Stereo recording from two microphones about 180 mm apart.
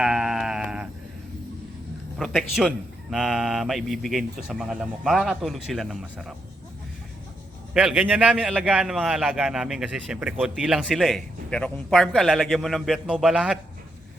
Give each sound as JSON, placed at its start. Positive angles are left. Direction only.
{"t": 0.0, "sound": "sheep", "side_deg": -5}
{"t": 2.1, "sound": "a man's voice", "side_deg": 0}
{"t": 7.7, "sound": "a man's voice", "side_deg": -5}